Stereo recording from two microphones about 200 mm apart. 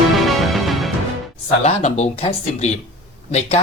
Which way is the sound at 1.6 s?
35° left (ahead or behind).